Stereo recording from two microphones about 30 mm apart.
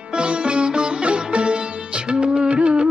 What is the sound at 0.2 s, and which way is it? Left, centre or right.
Sitar, right.